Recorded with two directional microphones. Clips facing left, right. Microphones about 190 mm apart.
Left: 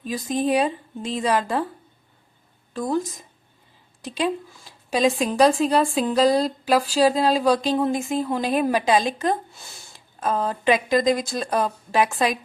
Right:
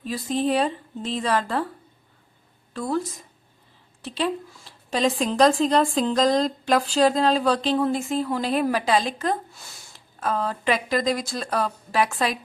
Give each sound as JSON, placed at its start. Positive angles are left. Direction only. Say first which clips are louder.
{"t": 0.1, "sound": "a woman's voice", "louder": "left 1 dB", "side_deg": 15}
{"t": 2.7, "sound": "a woman's voice", "louder": "left 2 dB", "side_deg": 20}